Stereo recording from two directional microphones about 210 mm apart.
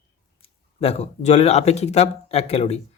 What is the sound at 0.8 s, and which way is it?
Speech, 30° left (ahead or behind).